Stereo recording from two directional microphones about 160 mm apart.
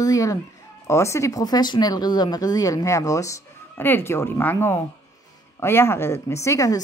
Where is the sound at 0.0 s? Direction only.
20° left (ahead or behind).